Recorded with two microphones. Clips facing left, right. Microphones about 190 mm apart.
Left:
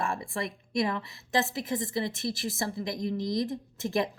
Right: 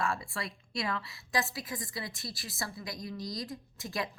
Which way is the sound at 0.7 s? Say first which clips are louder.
Left 7 dB; 20° left (ahead or behind).